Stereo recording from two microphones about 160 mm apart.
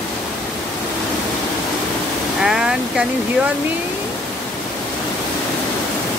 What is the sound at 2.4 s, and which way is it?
Speech, 5° right (ahead or behind).